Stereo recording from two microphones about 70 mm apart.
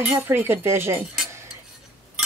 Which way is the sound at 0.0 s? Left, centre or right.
Right.